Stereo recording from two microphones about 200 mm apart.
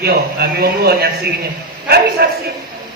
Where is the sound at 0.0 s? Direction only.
50° right (ahead or behind).